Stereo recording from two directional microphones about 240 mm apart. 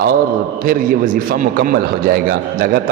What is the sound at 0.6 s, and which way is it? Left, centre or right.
A man's voice, right.